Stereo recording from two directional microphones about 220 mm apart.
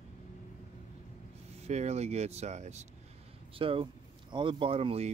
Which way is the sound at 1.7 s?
30° right (ahead or behind).